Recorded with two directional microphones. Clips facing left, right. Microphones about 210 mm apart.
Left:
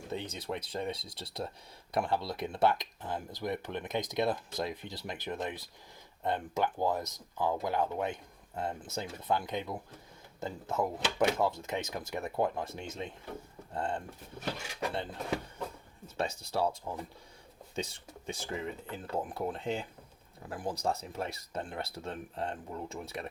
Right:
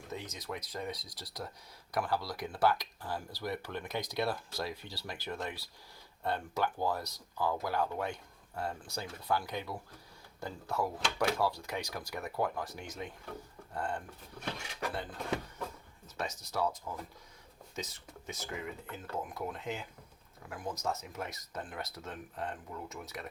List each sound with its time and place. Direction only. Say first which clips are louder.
0.1 s speech: left 4 dB; 30° left (ahead or behind)